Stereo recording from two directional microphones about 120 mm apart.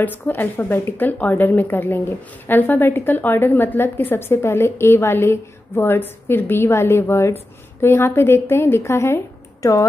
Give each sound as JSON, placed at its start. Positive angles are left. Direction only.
{"t": 0.0, "sound": "a woman's voice", "side_deg": 15}